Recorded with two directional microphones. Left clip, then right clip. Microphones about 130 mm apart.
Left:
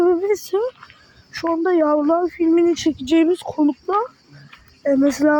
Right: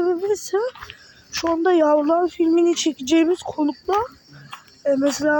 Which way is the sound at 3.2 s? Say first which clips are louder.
Left 3 dB; 30° left (ahead or behind).